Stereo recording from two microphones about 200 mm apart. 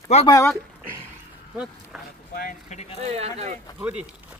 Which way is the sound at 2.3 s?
45° left (ahead or behind).